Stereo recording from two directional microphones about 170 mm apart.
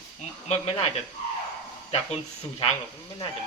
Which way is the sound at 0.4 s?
40° left (ahead or behind).